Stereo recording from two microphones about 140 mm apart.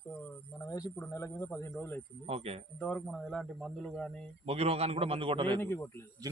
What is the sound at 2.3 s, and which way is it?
Speech, 45° right (ahead or behind).